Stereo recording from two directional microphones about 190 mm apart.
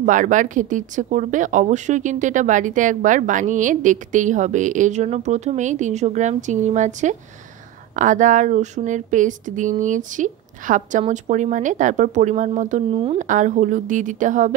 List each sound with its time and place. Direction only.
0.0 s speech: 45° right (ahead or behind)